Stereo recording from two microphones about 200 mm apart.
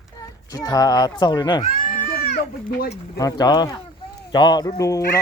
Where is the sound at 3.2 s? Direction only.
20° left (ahead or behind).